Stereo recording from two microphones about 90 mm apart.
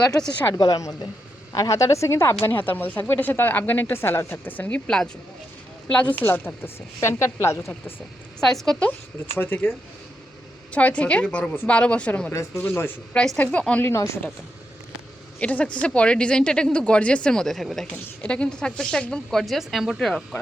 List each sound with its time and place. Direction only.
0.5 s a woman's voice: 45° left (ahead or behind); by 4.8 s 20° left (ahead or behind)
5.9 s speech: 15° left (ahead or behind); by 7.7 s 30° left (ahead or behind)
8.4 s speech: 5° left (ahead or behind)
8.9 s speech: 25° left (ahead or behind)
12.3 s speech: 30° left (ahead or behind)
13.1 s speech: 10° left (ahead or behind)
13.8 s speech: 30° left (ahead or behind)
15.4 s speech: 15° left (ahead or behind)